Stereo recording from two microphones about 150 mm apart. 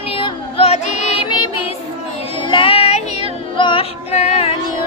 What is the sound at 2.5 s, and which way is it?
Child singing, 35° left (ahead or behind).